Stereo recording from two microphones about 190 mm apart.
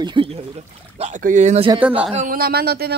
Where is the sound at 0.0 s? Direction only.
25° right (ahead or behind).